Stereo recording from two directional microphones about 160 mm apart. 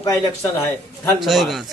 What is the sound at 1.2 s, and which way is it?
Speech, centre (ahead or behind).